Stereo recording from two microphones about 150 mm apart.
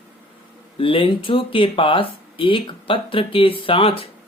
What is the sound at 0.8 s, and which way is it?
Speech, 35° left (ahead or behind).